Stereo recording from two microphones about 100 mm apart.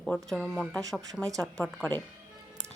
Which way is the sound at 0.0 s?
5° left (ahead or behind).